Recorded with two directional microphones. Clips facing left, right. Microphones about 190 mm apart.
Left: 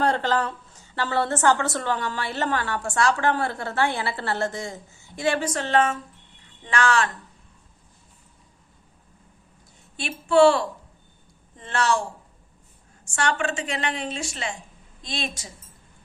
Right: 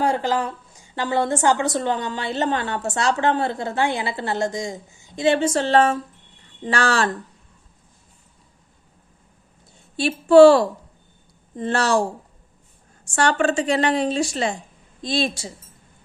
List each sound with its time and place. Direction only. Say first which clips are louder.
0.0 s a woman's voice: right 1 dB; 10° right (ahead or behind); by 7.1 s 35° right (ahead or behind)
10.0 s a woman's voice: right 7 dB; 35° right (ahead or behind)
13.1 s a woman's voice: right 6 dB; 35° right (ahead or behind)